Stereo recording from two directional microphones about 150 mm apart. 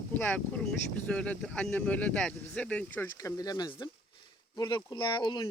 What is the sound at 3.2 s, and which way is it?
Speech, 25° left (ahead or behind).